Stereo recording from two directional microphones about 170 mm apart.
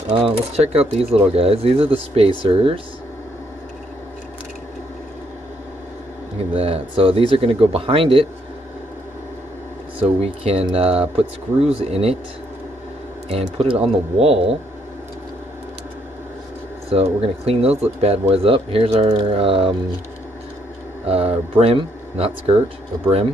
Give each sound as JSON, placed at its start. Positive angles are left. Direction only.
{"t": 0.1, "sound": "speech", "side_deg": -35}
{"t": 6.5, "sound": "speech", "side_deg": -35}
{"t": 9.9, "sound": "speech", "side_deg": -35}
{"t": 13.3, "sound": "speech", "side_deg": -35}
{"t": 16.9, "sound": "speech", "side_deg": -35}
{"t": 21.1, "sound": "speech", "side_deg": -35}